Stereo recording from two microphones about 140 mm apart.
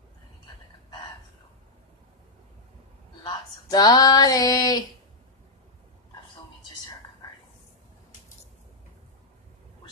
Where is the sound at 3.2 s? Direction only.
30° left (ahead or behind).